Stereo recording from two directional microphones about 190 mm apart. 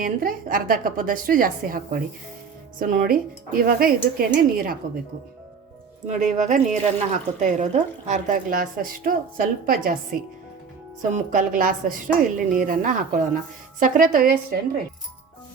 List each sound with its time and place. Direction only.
0.0 s a woman's voice: 50° right (ahead or behind)
6.1 s speech: 40° right (ahead or behind)
11.1 s a woman's voice: 45° right (ahead or behind)